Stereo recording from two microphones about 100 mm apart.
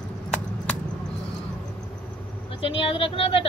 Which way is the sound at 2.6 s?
65° left (ahead or behind).